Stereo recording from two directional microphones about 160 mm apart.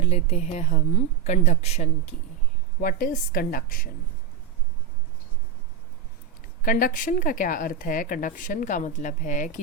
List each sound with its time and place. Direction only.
0.0 s speech: 40° left (ahead or behind)
2.8 s speech: 60° left (ahead or behind)
6.6 s speech: 60° left (ahead or behind)